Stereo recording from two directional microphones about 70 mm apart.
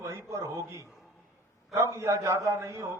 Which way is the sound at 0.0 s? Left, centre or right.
Right.